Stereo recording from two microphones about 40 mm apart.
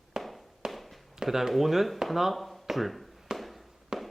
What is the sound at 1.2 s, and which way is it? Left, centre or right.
Speech, centre.